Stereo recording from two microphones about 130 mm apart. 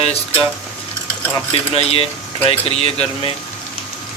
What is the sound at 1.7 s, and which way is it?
Speech, 50° left (ahead or behind).